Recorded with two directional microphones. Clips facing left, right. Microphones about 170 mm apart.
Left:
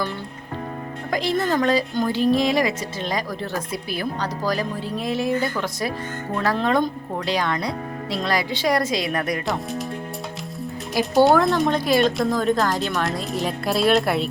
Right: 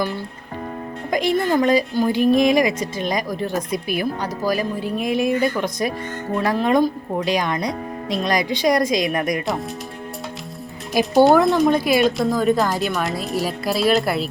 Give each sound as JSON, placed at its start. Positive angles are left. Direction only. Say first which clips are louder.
{"t": 1.1, "sound": "a woman's voice", "louder": "right 3 dB", "side_deg": -15}
{"t": 11.0, "sound": "a woman's voice", "louder": "right 3 dB", "side_deg": -15}
{"t": 11.4, "sound": "speech", "louder": "right 3 dB", "side_deg": 0}